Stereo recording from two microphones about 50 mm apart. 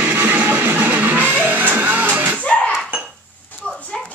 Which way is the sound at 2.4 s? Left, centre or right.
Left.